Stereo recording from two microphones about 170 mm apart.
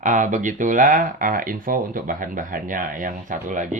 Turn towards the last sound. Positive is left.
turn(degrees=-50)  # may be behind; listen again after turning